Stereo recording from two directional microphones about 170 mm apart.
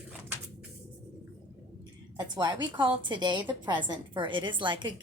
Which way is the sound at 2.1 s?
25° right (ahead or behind).